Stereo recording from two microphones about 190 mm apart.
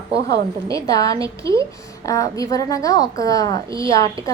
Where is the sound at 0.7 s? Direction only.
20° left (ahead or behind).